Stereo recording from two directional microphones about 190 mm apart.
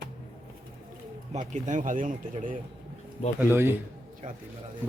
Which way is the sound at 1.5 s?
40° right (ahead or behind).